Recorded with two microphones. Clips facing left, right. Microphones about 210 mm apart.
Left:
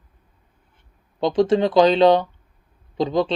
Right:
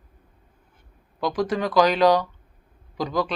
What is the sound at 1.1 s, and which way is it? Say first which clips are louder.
Speech: left 7 dB; 25° left (ahead or behind).